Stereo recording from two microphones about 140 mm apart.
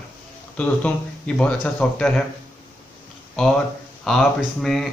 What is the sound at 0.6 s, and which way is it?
Speech, 5° left (ahead or behind).